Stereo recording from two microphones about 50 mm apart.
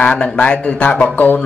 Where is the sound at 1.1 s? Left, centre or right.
Left.